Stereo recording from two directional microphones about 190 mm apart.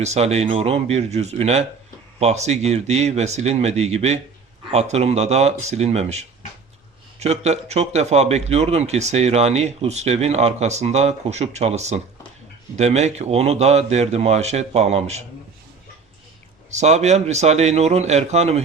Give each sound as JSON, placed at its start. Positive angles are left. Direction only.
{"t": 0.0, "sound": "a man's voice", "side_deg": -35}
{"t": 16.7, "sound": "a man's voice", "side_deg": -35}